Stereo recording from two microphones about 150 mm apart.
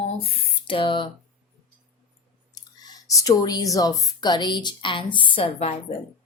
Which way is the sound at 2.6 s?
25° left (ahead or behind).